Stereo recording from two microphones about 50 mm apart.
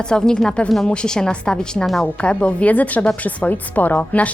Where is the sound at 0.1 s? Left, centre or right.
Centre.